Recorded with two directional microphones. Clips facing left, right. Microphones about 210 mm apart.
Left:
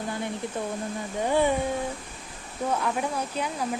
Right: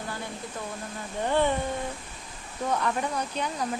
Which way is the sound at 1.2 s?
10° left (ahead or behind).